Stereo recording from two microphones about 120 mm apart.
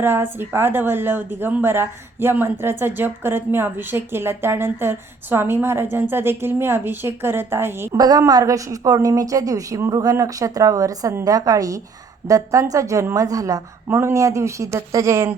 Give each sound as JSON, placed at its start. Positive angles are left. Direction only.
{"t": 0.0, "sound": "speech", "side_deg": -20}
{"t": 7.9, "sound": "speech", "side_deg": -30}